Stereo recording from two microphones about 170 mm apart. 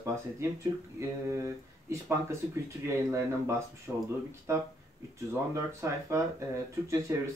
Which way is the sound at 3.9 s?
5° right (ahead or behind).